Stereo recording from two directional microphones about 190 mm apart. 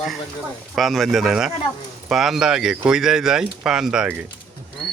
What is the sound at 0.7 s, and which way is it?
Speech, centre (ahead or behind).